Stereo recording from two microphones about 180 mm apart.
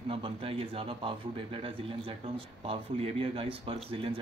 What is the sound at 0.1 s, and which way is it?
Speech, 30° right (ahead or behind).